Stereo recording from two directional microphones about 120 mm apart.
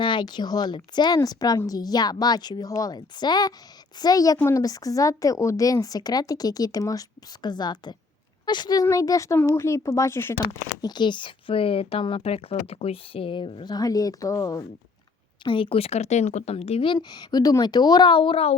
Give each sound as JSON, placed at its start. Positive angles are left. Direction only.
{"t": 0.0, "sound": "a woman's voice", "side_deg": 40}
{"t": 10.4, "sound": "speech", "side_deg": 35}
{"t": 15.4, "sound": "speech", "side_deg": 45}
{"t": 16.9, "sound": "a woman's voice", "side_deg": 35}